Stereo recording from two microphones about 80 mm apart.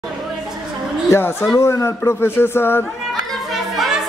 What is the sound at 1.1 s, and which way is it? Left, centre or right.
Speech, left.